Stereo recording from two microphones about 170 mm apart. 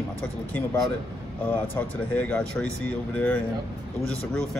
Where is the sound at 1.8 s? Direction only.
5° left (ahead or behind).